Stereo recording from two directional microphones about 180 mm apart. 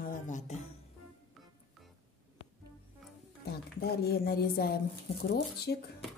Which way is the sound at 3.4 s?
60° left (ahead or behind).